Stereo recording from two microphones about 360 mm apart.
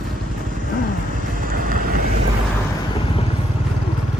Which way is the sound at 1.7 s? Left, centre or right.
Right.